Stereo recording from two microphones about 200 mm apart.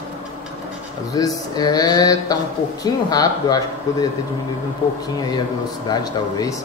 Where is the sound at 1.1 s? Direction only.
20° left (ahead or behind).